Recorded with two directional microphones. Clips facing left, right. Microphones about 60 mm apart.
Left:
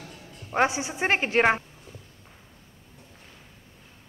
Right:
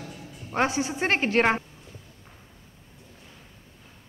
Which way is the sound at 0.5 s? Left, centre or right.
Centre.